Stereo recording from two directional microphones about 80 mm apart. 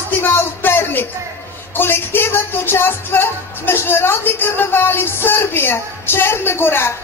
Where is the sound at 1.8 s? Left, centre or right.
Left.